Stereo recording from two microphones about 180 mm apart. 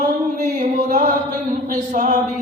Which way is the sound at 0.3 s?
50° right (ahead or behind).